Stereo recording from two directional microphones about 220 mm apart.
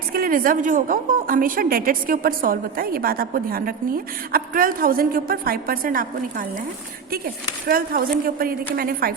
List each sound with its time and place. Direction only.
0.1 s a woman's voice: 40° right (ahead or behind)
7.7 s a woman's voice: 40° right (ahead or behind)